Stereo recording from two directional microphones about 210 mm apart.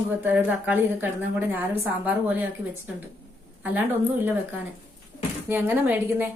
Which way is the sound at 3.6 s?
10° right (ahead or behind).